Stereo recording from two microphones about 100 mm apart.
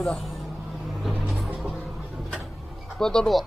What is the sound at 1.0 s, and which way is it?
Vehicle, centre (ahead or behind).